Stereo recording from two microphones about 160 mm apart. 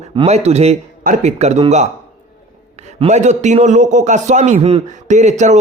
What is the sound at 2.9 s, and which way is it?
A man's voice, 45° right (ahead or behind).